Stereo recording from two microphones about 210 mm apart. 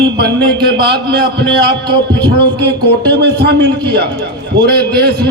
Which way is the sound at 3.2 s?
50° right (ahead or behind).